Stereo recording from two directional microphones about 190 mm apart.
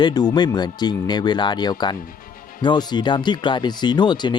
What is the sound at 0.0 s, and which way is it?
Speech, 20° left (ahead or behind).